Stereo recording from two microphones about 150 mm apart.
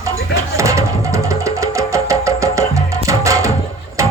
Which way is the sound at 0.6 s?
20° right (ahead or behind).